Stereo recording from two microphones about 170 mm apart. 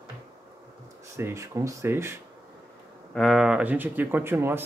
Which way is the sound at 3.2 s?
Centre (ahead or behind).